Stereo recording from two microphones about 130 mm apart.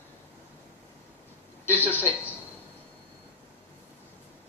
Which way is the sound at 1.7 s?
15° left (ahead or behind).